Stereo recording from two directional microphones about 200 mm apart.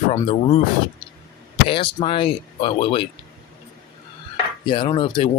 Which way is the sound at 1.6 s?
25° left (ahead or behind).